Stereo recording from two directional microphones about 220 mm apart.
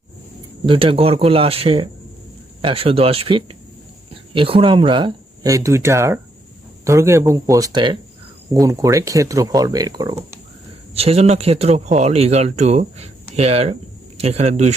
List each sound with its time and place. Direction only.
0.6 s speech: 25° right (ahead or behind)
10.9 s speech: 25° right (ahead or behind)